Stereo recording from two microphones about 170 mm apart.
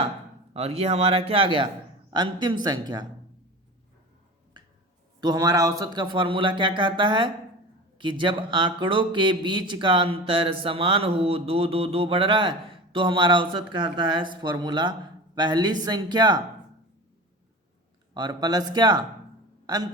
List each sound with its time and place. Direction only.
0.5 s a man's voice: 35° right (ahead or behind)
5.2 s speech: 25° right (ahead or behind)
18.1 s speech: 25° right (ahead or behind)